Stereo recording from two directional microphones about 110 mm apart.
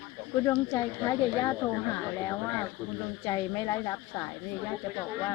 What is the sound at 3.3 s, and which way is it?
Speech, 35° left (ahead or behind).